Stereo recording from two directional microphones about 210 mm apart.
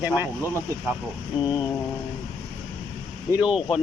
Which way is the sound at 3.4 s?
5° right (ahead or behind).